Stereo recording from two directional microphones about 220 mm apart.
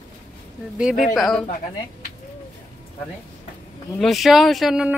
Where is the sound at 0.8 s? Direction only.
5° right (ahead or behind).